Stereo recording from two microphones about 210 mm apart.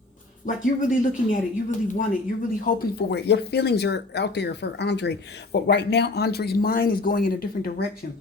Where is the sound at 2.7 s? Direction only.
45° left (ahead or behind).